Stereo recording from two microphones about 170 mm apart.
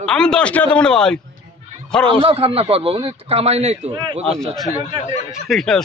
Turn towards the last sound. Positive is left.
turn(degrees=0)  # may be behind; listen again after turning